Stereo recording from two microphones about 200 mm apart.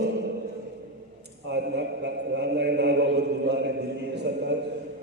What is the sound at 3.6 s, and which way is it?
Chant, 55° right (ahead or behind).